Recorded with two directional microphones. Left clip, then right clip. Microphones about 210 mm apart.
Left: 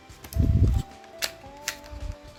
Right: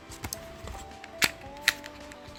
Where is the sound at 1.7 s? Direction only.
15° right (ahead or behind).